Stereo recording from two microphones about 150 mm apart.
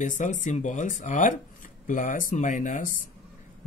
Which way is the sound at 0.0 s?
55° left (ahead or behind).